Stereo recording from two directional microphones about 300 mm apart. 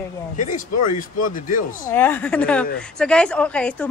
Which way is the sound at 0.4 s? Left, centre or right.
Left.